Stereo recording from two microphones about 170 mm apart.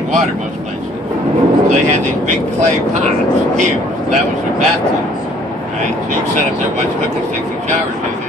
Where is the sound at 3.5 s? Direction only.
45° right (ahead or behind).